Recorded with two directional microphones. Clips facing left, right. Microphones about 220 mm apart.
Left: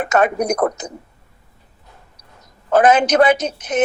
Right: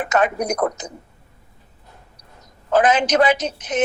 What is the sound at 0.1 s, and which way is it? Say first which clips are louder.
Speech: left 3 dB; 55° left (ahead or behind).